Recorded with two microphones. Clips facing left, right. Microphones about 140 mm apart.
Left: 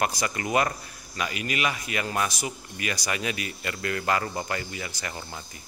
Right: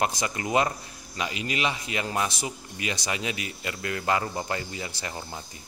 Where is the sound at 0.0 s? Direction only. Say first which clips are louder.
Even; 20° right (ahead or behind).